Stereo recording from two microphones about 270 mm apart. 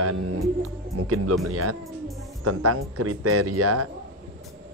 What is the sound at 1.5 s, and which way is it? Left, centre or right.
Speech, right.